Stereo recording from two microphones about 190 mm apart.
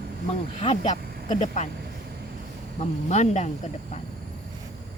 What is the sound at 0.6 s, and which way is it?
Speech, 35° left (ahead or behind).